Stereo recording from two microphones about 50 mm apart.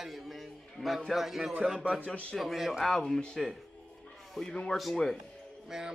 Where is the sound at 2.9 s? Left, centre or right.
Centre.